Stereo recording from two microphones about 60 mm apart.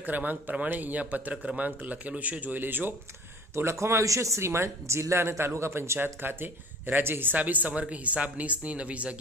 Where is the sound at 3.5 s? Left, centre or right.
Right.